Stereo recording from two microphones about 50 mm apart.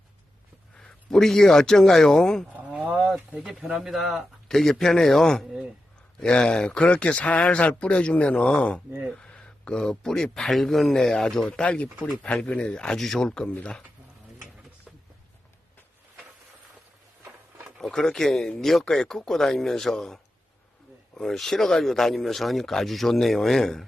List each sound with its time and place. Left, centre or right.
0.8 s speech: centre
2.5 s a sound: right
3.8 s speech: centre
4.4 s a man's voice: centre; by 13.0 s left
13.0 s a man's voice: centre
17.7 s a man's voice: centre
21.2 s speech: centre